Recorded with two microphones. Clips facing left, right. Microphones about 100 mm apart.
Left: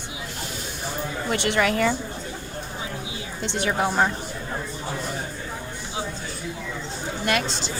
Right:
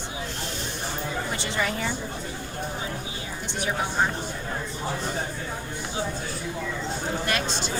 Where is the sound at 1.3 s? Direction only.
65° left (ahead or behind).